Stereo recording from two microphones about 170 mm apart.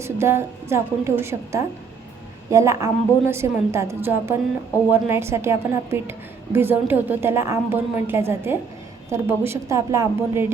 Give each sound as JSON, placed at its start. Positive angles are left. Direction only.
{"t": 0.0, "sound": "a woman's voice", "side_deg": -15}